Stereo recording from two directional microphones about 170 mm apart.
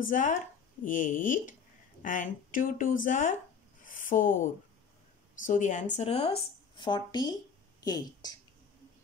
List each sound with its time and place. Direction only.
0.1 s speech: 50° left (ahead or behind)
3.8 s a sound: 50° left (ahead or behind)
5.5 s speech: 45° left (ahead or behind); by 8.4 s 25° left (ahead or behind)